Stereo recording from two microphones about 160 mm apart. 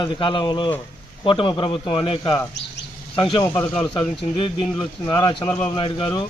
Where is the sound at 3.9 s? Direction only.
30° left (ahead or behind).